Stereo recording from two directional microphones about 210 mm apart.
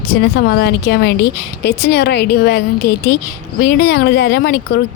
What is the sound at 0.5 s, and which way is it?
A woman's voice, 50° left (ahead or behind).